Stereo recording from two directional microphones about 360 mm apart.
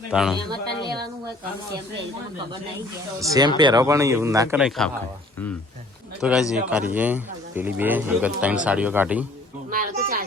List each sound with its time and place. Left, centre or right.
0.1 s speech: centre
3.2 s a man's voice: centre
6.2 s speech: centre
9.6 s speech: right